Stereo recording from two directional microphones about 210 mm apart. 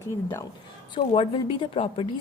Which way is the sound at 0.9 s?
25° left (ahead or behind).